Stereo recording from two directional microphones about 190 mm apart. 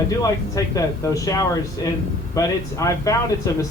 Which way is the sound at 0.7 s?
15° left (ahead or behind).